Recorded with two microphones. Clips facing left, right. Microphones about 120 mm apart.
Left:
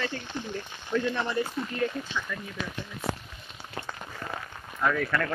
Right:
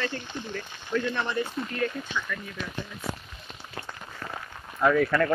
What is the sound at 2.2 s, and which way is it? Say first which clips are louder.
Speech: right 4 dB; 15° left (ahead or behind).